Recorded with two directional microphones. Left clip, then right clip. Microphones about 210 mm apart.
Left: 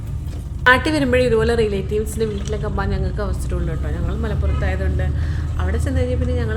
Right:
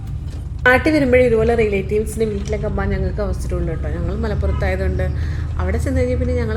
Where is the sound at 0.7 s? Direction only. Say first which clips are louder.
Right 1 dB; 10° right (ahead or behind).